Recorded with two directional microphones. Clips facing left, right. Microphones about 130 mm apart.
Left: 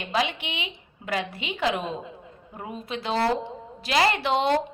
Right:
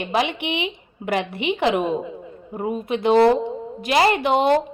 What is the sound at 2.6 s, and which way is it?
A woman's voice, 50° right (ahead or behind).